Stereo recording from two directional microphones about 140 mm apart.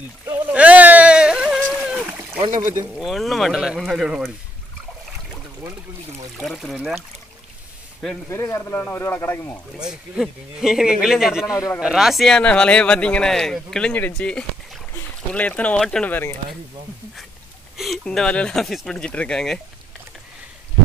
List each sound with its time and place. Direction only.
0.5 s sheep: 10° right (ahead or behind)
1.7 s splash: 5° right (ahead or behind)
2.9 s speech: centre (ahead or behind)
6.3 s speech: centre (ahead or behind)
8.3 s speech: 20° left (ahead or behind)
9.8 s speech: 5° right (ahead or behind); by 16.3 s 15° left (ahead or behind)
17.7 s speech: centre (ahead or behind)